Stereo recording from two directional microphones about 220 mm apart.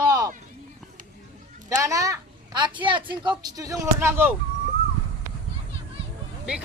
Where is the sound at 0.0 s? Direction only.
15° right (ahead or behind).